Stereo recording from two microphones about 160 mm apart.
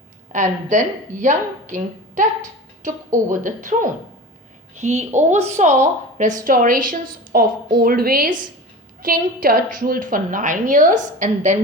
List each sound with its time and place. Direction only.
0.3 s a woman's voice: 50° right (ahead or behind)
3.2 s a woman's voice: 55° right (ahead or behind)